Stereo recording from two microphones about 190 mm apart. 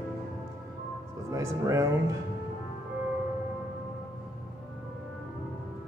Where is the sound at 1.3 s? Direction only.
15° right (ahead or behind).